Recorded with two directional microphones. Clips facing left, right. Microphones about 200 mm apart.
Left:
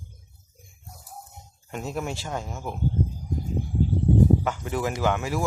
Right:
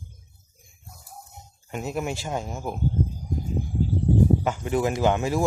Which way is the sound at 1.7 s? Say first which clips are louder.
Right 2 dB; 10° right (ahead or behind).